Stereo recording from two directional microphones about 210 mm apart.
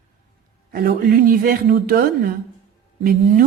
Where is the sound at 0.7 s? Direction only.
45° right (ahead or behind).